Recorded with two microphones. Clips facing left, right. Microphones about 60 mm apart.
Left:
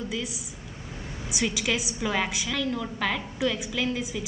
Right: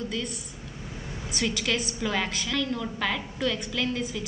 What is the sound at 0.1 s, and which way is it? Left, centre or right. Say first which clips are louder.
A woman's voice: even; centre.